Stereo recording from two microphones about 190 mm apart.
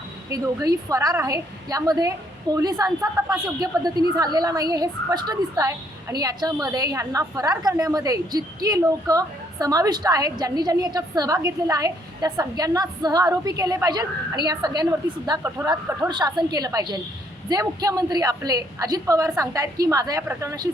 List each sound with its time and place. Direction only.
0.3 s a woman's voice: 20° right (ahead or behind)